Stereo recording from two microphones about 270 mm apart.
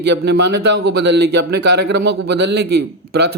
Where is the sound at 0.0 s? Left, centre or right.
Right.